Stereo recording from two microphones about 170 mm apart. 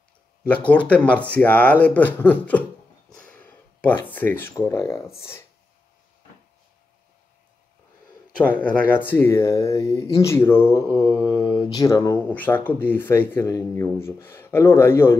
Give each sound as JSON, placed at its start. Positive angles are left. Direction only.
{"t": 0.7, "sound": "speech", "side_deg": 10}
{"t": 8.5, "sound": "speech", "side_deg": 10}